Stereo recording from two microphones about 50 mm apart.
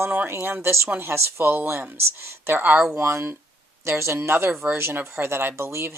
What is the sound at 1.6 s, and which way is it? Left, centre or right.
Speech, right.